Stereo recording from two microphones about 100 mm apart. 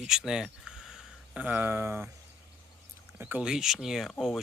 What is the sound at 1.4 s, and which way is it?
Speech, 20° right (ahead or behind).